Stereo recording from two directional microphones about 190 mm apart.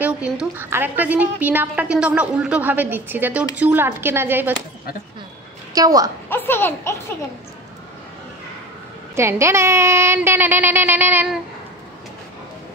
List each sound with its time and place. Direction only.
0.0 s a woman's voice: 5° right (ahead or behind)
5.8 s a woman's voice: 20° right (ahead or behind)
6.2 s a sound: 10° left (ahead or behind)
9.1 s a woman's voice: 15° right (ahead or behind)